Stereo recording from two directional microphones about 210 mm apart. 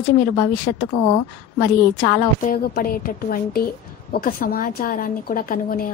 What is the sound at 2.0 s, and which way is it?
A woman's voice, 40° left (ahead or behind).